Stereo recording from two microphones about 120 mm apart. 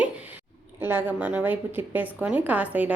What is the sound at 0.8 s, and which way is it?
A woman's voice, 15° right (ahead or behind).